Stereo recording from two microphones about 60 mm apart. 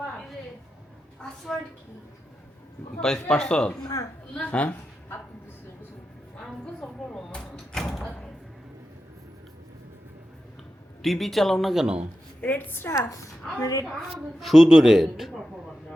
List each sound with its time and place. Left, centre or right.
1.5 s speech: centre
3.0 s a woman's voice: centre
6.7 s a sound: centre
7.8 s door: centre
11.0 s speech: centre
12.4 s a woman's voice: left
12.9 s a woman's voice: left
14.3 s speech: centre